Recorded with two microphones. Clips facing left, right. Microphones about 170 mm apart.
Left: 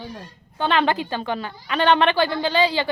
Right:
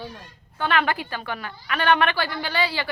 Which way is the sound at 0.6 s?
25° left (ahead or behind).